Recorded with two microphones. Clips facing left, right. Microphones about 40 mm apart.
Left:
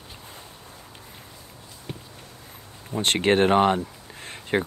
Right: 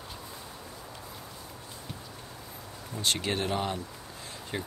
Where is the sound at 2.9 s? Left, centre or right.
Left.